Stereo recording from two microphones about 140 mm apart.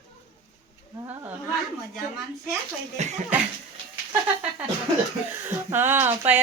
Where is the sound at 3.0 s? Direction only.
55° right (ahead or behind).